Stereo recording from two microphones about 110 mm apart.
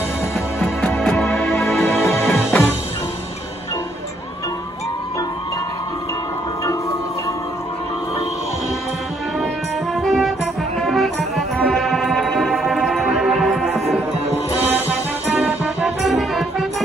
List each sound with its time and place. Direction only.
0.8 s music: 15° left (ahead or behind)
9.9 s music: centre (ahead or behind)
15.2 s music: 15° right (ahead or behind)
16.0 s music: centre (ahead or behind)